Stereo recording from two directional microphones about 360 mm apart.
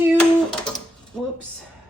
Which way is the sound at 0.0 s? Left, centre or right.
Centre.